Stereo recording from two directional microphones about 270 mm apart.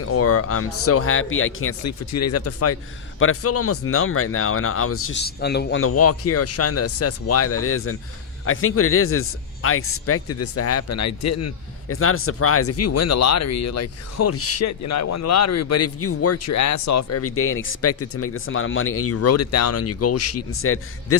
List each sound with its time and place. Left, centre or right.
0.0 s speech: left
1.8 s speech: left
5.2 s a man's voice: left
5.8 s speech: left